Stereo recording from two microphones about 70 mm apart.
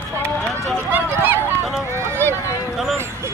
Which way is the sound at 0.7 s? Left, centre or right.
Right.